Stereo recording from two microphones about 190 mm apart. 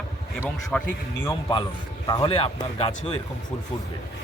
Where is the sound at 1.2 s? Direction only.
25° left (ahead or behind).